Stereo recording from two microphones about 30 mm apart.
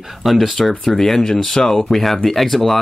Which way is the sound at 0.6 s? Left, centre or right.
Centre.